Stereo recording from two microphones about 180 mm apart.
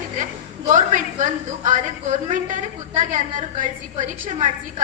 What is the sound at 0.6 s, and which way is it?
A woman's voice, 45° right (ahead or behind).